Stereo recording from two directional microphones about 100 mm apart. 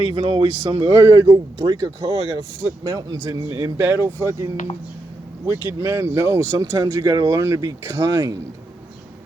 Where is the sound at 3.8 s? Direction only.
20° right (ahead or behind).